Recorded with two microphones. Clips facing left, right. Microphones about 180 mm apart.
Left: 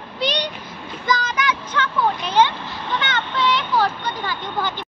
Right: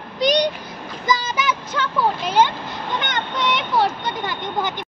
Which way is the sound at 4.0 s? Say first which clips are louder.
Right 1 dB; 20° right (ahead or behind).